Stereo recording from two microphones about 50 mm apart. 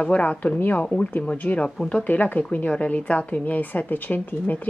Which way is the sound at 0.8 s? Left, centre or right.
Left.